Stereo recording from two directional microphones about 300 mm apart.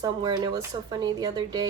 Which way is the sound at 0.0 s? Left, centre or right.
Centre.